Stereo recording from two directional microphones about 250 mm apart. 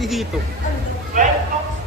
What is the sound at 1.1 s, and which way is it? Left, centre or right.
Speech, right.